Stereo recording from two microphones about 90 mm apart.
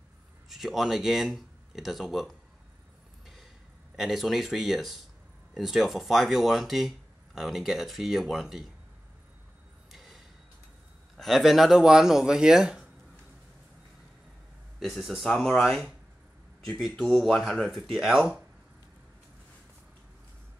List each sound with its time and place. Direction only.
0.5 s speech: 5° right (ahead or behind)
3.9 s speech: centre (ahead or behind)
9.8 s a sound: 5° right (ahead or behind)
11.1 s speech: centre (ahead or behind)
14.8 s speech: centre (ahead or behind)